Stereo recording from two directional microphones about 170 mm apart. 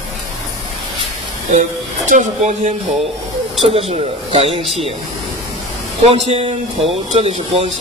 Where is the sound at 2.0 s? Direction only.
45° right (ahead or behind).